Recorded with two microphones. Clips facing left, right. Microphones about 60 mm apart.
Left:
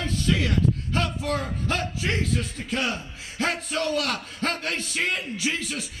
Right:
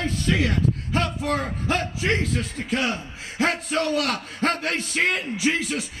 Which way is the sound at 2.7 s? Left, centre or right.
Centre.